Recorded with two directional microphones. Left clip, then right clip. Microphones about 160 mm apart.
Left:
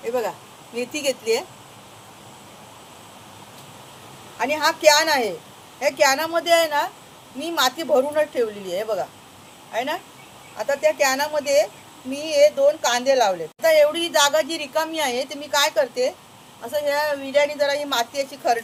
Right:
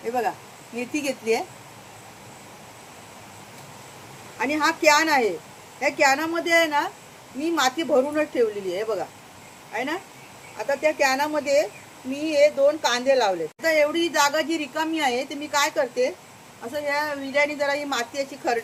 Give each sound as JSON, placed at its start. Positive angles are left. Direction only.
{"t": 0.1, "sound": "a woman's voice", "side_deg": -15}
{"t": 4.4, "sound": "a woman's voice", "side_deg": -15}